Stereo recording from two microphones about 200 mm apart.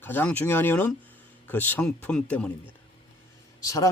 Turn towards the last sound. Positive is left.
turn(degrees=15)  # may be behind; listen again after turning